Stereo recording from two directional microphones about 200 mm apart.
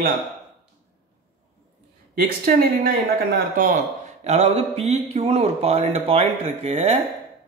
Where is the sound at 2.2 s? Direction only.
50° right (ahead or behind); by 7.0 s 30° right (ahead or behind).